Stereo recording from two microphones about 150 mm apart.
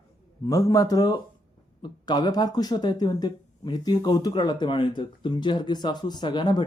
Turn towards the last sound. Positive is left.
turn(degrees=30)  # may be behind; listen again after turning